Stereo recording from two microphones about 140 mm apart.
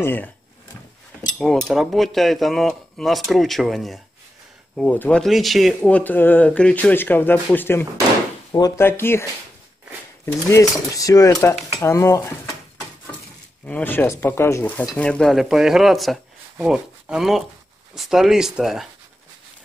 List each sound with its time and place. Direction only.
0.0 s speech: 15° left (ahead or behind)
1.4 s speech: centre (ahead or behind)
4.7 s speech: 10° left (ahead or behind)
5.2 s speech: centre (ahead or behind)
8.5 s speech: 25° left (ahead or behind)
8.8 s speech: 15° left (ahead or behind)
10.2 s speech: 20° left (ahead or behind)
11.3 s speech: 5° left (ahead or behind)
11.8 s speech: 20° left (ahead or behind)
13.7 s speech: 10° left (ahead or behind)
15.0 s speech: 5° left (ahead or behind)